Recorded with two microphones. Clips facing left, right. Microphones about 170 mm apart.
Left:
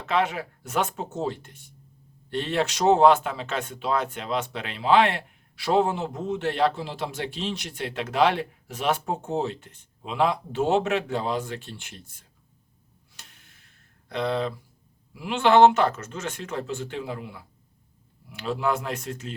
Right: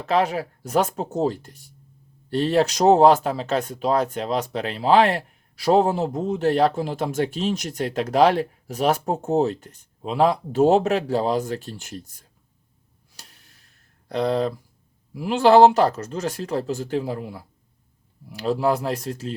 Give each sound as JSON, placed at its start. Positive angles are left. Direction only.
{"t": 0.0, "sound": "speech", "side_deg": -35}
{"t": 13.1, "sound": "a sound", "side_deg": -35}
{"t": 14.1, "sound": "speech", "side_deg": -40}